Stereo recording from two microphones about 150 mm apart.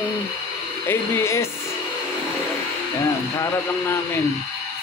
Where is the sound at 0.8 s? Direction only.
20° left (ahead or behind).